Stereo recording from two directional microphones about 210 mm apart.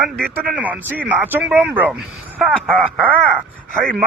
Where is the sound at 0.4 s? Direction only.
5° right (ahead or behind).